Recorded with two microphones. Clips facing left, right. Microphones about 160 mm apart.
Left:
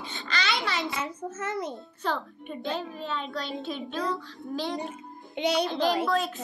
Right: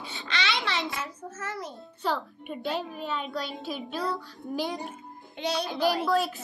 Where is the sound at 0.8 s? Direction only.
20° left (ahead or behind).